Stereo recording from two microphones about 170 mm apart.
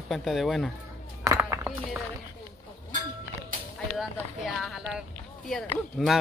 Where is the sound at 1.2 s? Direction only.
15° right (ahead or behind).